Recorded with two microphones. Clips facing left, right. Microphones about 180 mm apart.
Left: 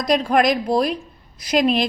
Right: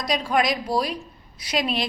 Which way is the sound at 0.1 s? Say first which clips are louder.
Left 6 dB; 50° left (ahead or behind).